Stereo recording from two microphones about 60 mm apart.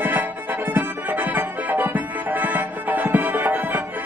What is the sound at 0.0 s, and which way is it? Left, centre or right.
Music, right.